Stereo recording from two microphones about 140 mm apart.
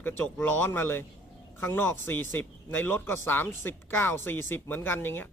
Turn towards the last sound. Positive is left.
turn(degrees=15)  # may be behind; listen again after turning